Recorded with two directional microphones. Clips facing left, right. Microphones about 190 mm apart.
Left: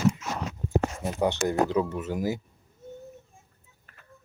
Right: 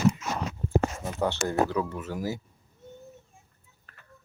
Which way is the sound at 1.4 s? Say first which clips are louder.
Left 2 dB; 20° left (ahead or behind).